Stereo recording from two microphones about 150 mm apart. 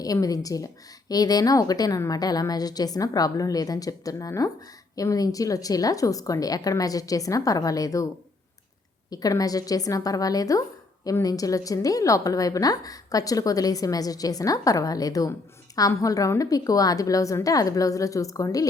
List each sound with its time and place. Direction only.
0.0 s a woman's voice: 25° left (ahead or behind)
9.0 s a woman's voice: 25° left (ahead or behind)